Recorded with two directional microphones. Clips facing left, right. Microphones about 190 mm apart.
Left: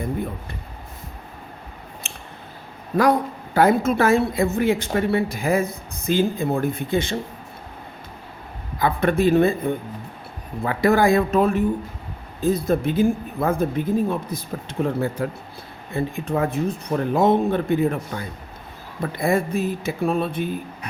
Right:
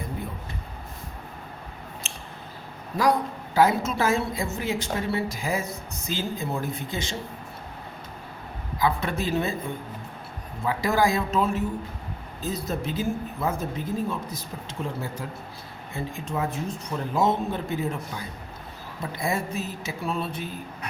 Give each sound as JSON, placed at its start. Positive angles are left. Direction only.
{"t": 2.0, "sound": "scissors", "side_deg": 60}
{"t": 3.5, "sound": "a woman's voice", "side_deg": 55}
{"t": 8.8, "sound": "a woman's voice", "side_deg": 55}